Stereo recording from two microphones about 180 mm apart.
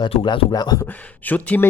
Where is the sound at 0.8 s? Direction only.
10° left (ahead or behind).